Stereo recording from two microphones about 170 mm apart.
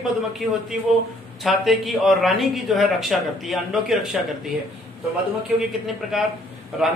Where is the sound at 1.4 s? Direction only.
Centre (ahead or behind).